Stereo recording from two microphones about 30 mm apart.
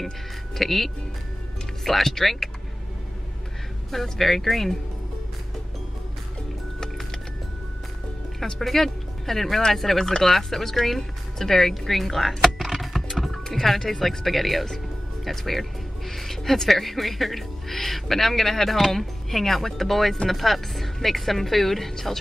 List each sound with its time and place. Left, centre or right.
0.6 s speech: centre
3.9 s speech: centre
8.5 s speech: centre
11.8 s a sound: centre
13.4 s music: centre
13.7 s speech: centre